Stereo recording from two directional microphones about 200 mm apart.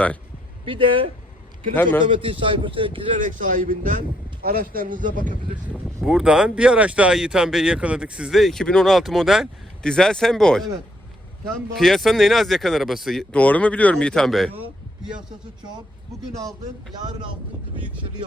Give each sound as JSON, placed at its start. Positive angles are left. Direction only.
{"t": 0.6, "sound": "a man's voice", "side_deg": -25}
{"t": 1.7, "sound": "a man's voice", "side_deg": 10}
{"t": 2.0, "sound": "a man's voice", "side_deg": -25}
{"t": 3.2, "sound": "a man's voice", "side_deg": -40}
{"t": 6.0, "sound": "speech", "side_deg": -5}
{"t": 11.7, "sound": "speech", "side_deg": 0}
{"t": 16.9, "sound": "a man's voice", "side_deg": -20}